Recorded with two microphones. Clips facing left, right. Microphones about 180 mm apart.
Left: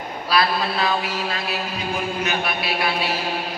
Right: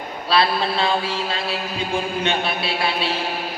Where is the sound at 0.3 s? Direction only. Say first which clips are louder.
Right 2 dB; 30° right (ahead or behind).